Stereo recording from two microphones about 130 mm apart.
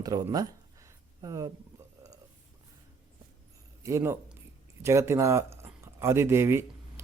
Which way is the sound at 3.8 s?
20° right (ahead or behind).